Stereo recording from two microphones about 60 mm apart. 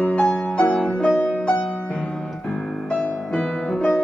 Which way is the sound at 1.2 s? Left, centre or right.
Left.